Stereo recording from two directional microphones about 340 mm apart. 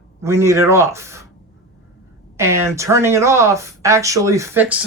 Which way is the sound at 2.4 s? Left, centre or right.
Centre.